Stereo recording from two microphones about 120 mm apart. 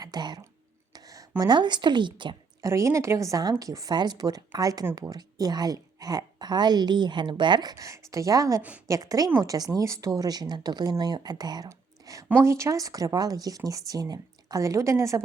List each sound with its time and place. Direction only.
0.0 s speech: 35° right (ahead or behind)
0.9 s a sound: 30° right (ahead or behind)
1.4 s a woman's voice: 35° right (ahead or behind)
2.6 s a woman's voice: 25° right (ahead or behind)
11.7 s whispering: 30° right (ahead or behind)
12.3 s speech: 25° right (ahead or behind)